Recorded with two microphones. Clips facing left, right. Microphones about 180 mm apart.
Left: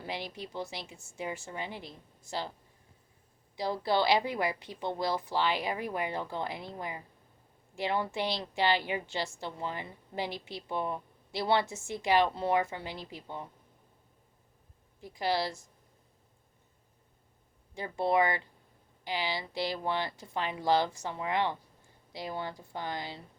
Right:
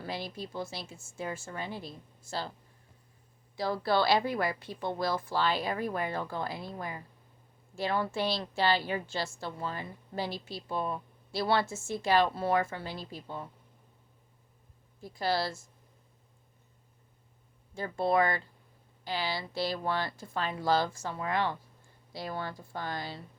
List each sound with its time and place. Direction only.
0.0 s a woman's voice: 15° left (ahead or behind)
3.5 s a woman's voice: 20° left (ahead or behind)
15.0 s a woman's voice: 15° left (ahead or behind)
17.7 s a woman's voice: 15° left (ahead or behind)